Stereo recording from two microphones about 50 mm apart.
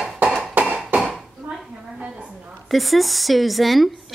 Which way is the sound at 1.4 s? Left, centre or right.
Right.